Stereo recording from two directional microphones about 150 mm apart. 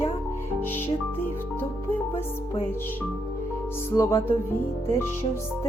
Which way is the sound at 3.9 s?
15° left (ahead or behind).